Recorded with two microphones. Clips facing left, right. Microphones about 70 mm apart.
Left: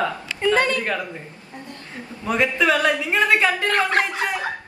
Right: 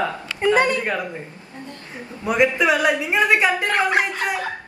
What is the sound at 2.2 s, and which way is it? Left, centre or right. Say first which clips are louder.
Speech: right 2 dB; centre.